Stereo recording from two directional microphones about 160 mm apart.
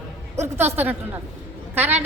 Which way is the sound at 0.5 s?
15° right (ahead or behind).